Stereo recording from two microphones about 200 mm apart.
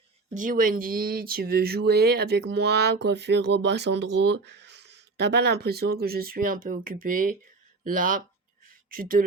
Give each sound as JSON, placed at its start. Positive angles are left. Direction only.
{"t": 0.3, "sound": "speech", "side_deg": -45}